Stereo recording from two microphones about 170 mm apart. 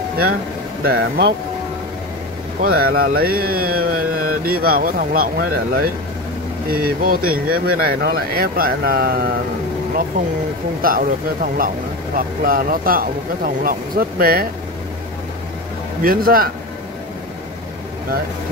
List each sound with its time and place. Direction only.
0.8 s speech: 65° right (ahead or behind)
2.6 s speech: 65° right (ahead or behind)
10.8 s speech: 55° right (ahead or behind)
16.0 s speech: 60° right (ahead or behind)